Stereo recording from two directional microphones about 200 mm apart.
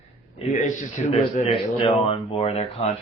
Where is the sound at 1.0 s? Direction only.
30° left (ahead or behind).